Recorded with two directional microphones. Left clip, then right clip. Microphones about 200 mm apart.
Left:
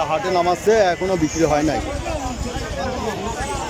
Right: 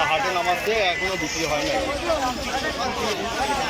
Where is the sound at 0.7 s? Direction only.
30° left (ahead or behind).